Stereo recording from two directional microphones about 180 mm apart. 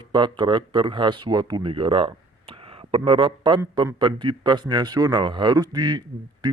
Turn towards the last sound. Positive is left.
turn(degrees=-25)  # may be behind; listen again after turning